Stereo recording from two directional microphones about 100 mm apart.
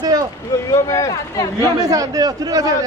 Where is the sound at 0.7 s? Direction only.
35° left (ahead or behind).